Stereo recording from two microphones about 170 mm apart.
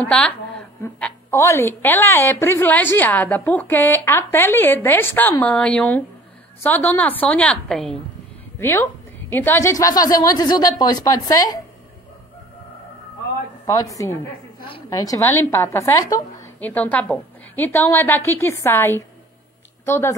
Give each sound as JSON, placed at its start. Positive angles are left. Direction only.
{"t": 0.0, "sound": "a sound", "side_deg": 5}
{"t": 1.4, "sound": "a woman's voice", "side_deg": 15}
{"t": 8.5, "sound": "a woman's voice", "side_deg": 15}
{"t": 13.7, "sound": "a woman's voice", "side_deg": 20}
{"t": 16.5, "sound": "a woman's voice", "side_deg": 10}